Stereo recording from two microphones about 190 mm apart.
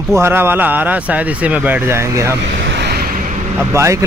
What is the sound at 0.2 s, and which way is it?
Speech, 10° right (ahead or behind).